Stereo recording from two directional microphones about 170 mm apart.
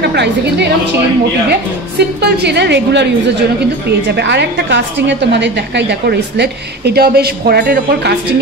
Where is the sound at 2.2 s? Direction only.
80° right.